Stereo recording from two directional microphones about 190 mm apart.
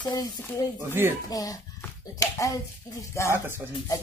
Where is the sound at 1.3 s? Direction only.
20° left (ahead or behind).